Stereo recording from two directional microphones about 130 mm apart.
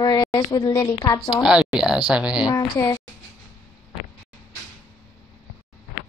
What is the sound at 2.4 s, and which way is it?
Speech, 25° left (ahead or behind).